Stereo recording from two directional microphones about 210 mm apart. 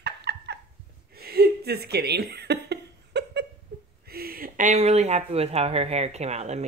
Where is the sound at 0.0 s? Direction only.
55° right (ahead or behind).